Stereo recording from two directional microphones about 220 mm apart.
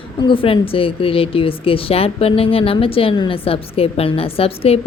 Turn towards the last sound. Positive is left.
turn(degrees=25)  # may be behind; listen again after turning